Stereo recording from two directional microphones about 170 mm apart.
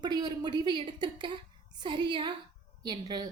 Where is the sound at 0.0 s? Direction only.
25° right (ahead or behind).